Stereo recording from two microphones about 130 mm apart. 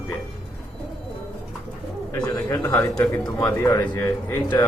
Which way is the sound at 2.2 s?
25° left (ahead or behind).